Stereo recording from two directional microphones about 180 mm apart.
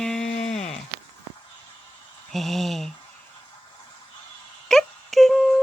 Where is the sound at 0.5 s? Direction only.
40° left (ahead or behind).